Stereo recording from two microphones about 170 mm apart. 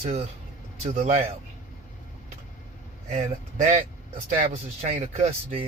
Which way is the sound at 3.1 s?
40° right (ahead or behind).